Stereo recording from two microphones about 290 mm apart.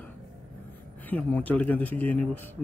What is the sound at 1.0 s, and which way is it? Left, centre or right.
Speech, centre.